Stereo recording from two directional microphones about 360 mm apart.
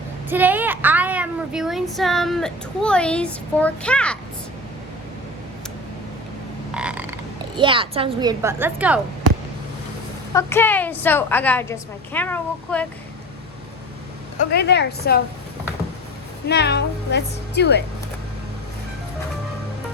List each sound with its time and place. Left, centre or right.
0.3 s speech: centre
6.7 s frog: centre
7.6 s a woman's voice: centre
10.3 s a woman's voice: centre
14.5 s speech: left
16.5 s speech: left